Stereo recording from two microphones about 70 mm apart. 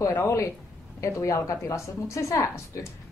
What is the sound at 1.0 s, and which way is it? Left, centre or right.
A woman's voice, left.